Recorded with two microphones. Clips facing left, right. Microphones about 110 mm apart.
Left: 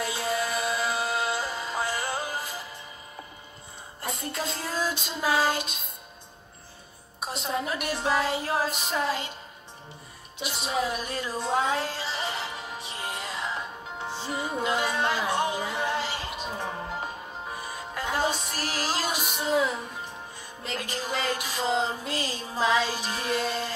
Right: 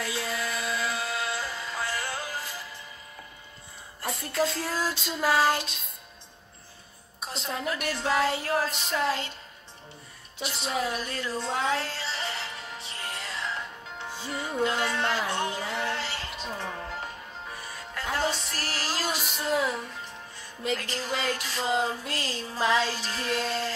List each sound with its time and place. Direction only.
0.0 s music: 20° left (ahead or behind)
4.0 s a woman's voice: 20° left (ahead or behind)
7.2 s a woman's voice: 15° left (ahead or behind)
10.4 s music: 15° left (ahead or behind)
20.7 s a woman's voice: 15° left (ahead or behind)